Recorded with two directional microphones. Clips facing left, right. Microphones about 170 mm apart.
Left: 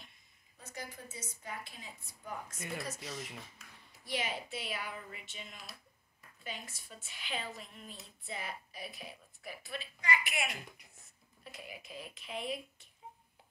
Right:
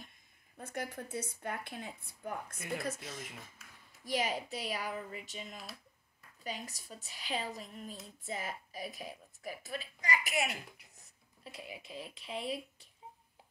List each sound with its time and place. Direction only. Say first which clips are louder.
0.6 s a woman's voice: right 6 dB; 55° right (ahead or behind)
4.0 s speech: right 4 dB; 40° right (ahead or behind)